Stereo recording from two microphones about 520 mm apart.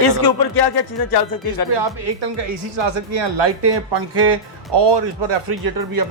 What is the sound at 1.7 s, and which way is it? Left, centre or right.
Speech, right.